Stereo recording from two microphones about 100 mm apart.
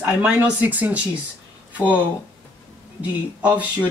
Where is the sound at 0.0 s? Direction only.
15° right (ahead or behind).